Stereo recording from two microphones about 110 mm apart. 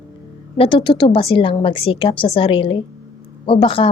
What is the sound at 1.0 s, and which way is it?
A woman's voice, 60° left (ahead or behind).